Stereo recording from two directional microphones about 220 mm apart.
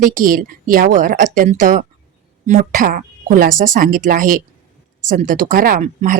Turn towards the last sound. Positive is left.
turn(degrees=-35)  # may be behind; listen again after turning